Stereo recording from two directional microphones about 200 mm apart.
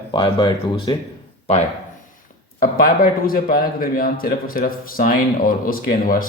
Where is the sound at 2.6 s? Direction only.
45° left (ahead or behind).